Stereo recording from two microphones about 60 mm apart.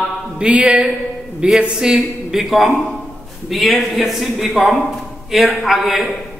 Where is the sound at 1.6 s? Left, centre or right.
Centre.